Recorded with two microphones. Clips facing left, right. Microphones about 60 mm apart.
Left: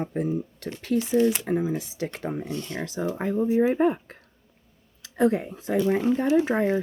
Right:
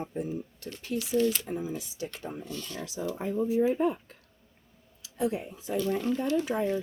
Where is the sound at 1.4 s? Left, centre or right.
Left.